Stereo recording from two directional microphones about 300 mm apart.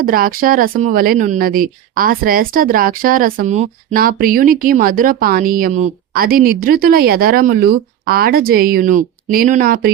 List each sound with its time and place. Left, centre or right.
0.0 s speech: right